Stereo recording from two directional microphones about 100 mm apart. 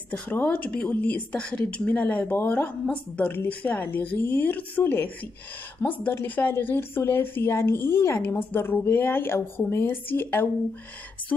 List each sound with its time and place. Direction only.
0.1 s a woman's voice: 15° left (ahead or behind)